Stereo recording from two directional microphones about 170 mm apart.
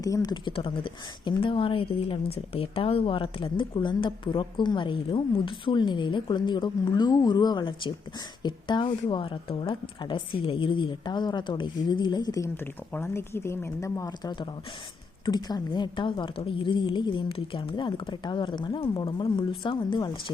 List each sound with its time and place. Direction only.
0.0 s speech: 20° left (ahead or behind)